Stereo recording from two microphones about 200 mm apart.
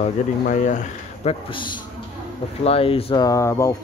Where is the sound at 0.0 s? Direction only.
40° left (ahead or behind).